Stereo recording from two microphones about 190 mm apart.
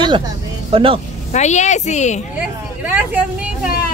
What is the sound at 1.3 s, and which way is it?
Speech, 40° left (ahead or behind).